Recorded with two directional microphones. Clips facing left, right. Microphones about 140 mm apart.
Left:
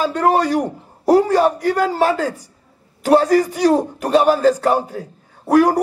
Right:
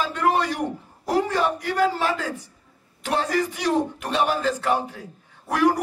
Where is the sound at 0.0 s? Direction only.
40° left (ahead or behind).